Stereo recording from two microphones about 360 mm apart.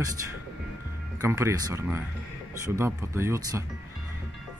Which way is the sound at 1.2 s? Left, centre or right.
Centre.